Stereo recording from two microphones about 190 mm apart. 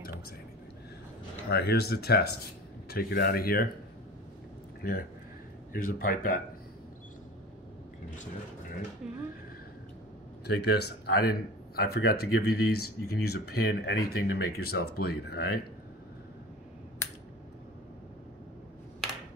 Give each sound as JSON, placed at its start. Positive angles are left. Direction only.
{"t": 1.5, "sound": "speech", "side_deg": 60}
{"t": 4.8, "sound": "speech", "side_deg": 50}
{"t": 10.4, "sound": "speech", "side_deg": 60}